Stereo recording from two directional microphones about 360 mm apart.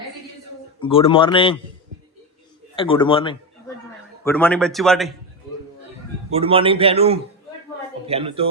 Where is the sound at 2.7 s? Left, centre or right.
Centre.